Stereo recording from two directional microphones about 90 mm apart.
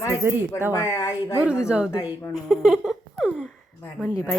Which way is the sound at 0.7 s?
35° left (ahead or behind).